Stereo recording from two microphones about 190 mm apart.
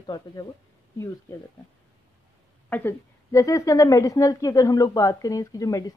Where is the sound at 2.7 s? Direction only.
15° left (ahead or behind).